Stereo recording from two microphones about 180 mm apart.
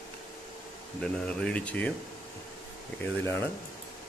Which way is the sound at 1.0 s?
5° left (ahead or behind).